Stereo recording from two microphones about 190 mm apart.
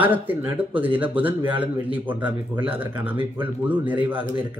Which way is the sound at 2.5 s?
25° right (ahead or behind).